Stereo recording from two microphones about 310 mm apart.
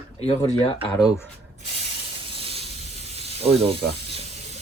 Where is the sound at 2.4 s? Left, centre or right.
Centre.